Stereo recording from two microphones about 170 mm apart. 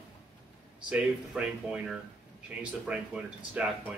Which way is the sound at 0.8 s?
5° right (ahead or behind).